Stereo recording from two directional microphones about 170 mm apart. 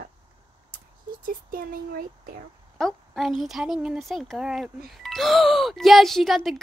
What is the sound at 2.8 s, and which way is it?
Speech, centre (ahead or behind).